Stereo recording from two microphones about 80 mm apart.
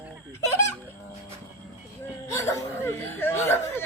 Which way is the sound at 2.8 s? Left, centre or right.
Left.